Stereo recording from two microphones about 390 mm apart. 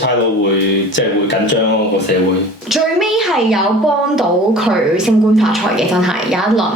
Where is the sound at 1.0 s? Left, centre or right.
Left.